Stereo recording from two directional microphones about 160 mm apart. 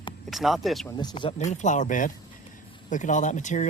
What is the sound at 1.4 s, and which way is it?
Speech, 50° left (ahead or behind).